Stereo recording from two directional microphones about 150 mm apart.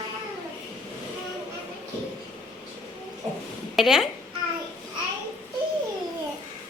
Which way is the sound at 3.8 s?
Centre (ahead or behind).